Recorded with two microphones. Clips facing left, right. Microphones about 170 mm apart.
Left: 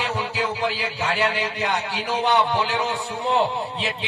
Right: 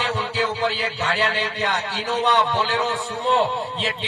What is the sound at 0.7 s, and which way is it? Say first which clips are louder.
A man's voice: right 1 dB; 75° right (ahead or behind).